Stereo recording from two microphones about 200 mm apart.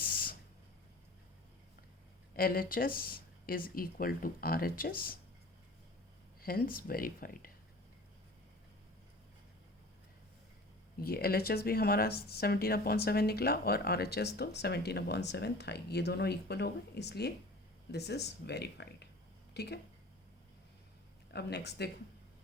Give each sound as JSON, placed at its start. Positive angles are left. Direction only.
{"t": 0.0, "sound": "a sound", "side_deg": 45}
{"t": 2.3, "sound": "speech", "side_deg": 45}
{"t": 6.4, "sound": "speech", "side_deg": 45}
{"t": 10.9, "sound": "speech", "side_deg": 50}
{"t": 21.3, "sound": "speech", "side_deg": 55}